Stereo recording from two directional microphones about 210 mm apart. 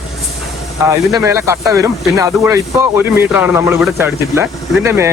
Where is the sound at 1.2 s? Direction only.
10° right (ahead or behind).